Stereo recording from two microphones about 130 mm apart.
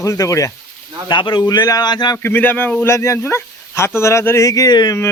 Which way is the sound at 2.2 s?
15° left (ahead or behind).